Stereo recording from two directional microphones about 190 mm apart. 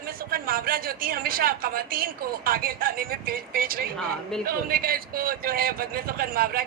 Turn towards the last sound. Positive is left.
turn(degrees=-50)  # may be behind; listen again after turning